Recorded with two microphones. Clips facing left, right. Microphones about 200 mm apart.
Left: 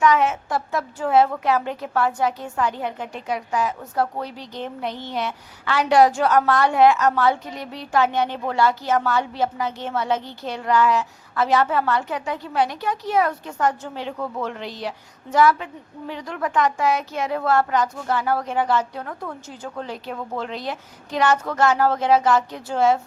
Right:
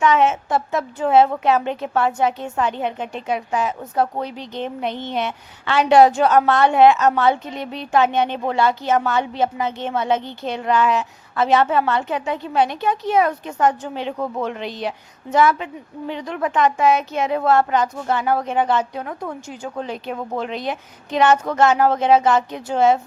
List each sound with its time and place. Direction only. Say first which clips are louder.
0.0 s a woman's voice: right 2 dB; 25° right (ahead or behind)